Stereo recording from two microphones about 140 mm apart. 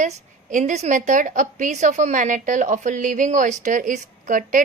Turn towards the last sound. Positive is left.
turn(degrees=-70)  # may be behind; listen again after turning